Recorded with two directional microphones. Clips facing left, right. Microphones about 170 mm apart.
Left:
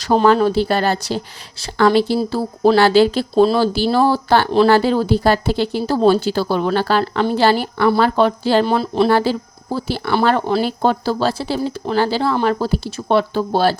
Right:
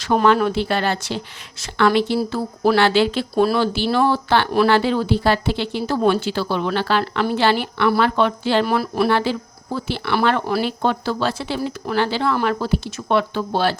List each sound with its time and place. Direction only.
0.0 s speech: 35° left (ahead or behind)
8.6 s speech: 25° left (ahead or behind)
9.0 s speech: 40° left (ahead or behind)